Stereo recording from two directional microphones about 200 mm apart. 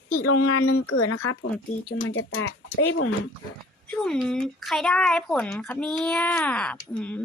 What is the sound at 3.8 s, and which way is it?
Speech, 5° left (ahead or behind).